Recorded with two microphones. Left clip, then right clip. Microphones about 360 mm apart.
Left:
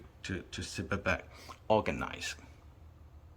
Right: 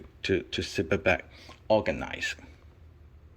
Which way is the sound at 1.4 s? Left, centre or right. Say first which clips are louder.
Right 4 dB; centre.